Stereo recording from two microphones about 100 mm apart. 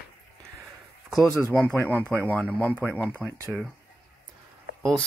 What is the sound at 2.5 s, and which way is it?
Speech, 15° left (ahead or behind).